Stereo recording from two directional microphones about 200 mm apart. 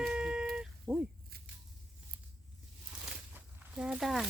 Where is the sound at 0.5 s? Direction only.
5° right (ahead or behind).